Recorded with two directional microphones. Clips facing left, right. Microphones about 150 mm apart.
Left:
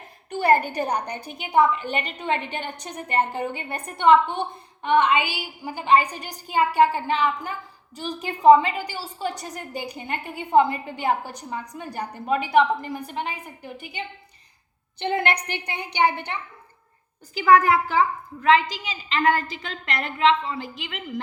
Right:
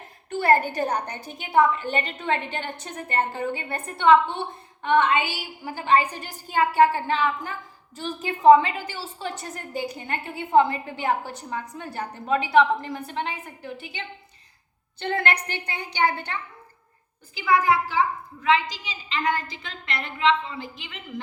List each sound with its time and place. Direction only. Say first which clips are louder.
0.3 s a woman's voice: left 1 dB; 15° left (ahead or behind)
17.3 s speech: left 4 dB; 45° left (ahead or behind)
19.0 s a woman's voice: left 4 dB; 50° left (ahead or behind)